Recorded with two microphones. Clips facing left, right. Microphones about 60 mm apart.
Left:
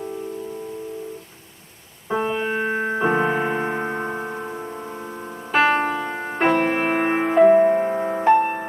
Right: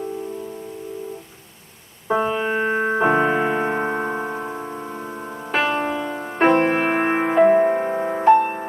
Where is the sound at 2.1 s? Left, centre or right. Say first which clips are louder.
Right 2 dB; centre.